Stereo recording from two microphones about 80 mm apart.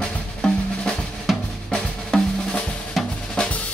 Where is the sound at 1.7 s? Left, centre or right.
Centre.